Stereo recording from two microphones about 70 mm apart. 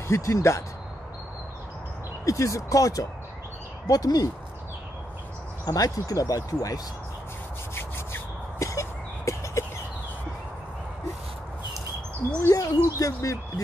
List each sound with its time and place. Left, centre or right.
0.1 s speech: left
2.2 s speech: left
5.7 s speech: left
7.7 s rub: left
12.4 s speech: left
12.8 s speech: left